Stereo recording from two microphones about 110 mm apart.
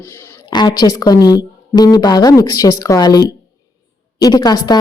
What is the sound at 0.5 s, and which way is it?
A woman's voice, 40° left (ahead or behind).